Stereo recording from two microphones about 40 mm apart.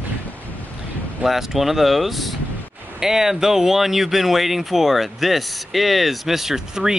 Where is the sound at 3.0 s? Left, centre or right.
Centre.